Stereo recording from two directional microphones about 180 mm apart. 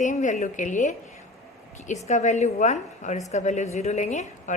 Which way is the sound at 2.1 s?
40° left (ahead or behind).